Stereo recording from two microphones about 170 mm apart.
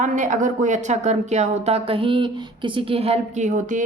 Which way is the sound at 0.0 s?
50° right (ahead or behind).